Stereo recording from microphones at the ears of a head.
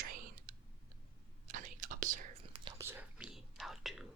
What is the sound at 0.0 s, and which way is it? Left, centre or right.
Clicking, right.